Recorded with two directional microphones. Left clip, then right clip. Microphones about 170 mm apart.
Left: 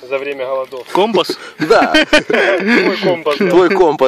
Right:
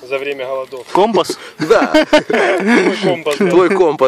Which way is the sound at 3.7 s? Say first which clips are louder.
Left 1 dB; 25° left (ahead or behind).